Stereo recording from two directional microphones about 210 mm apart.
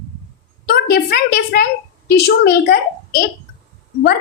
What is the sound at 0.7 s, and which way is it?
A woman's voice, 45° left (ahead or behind).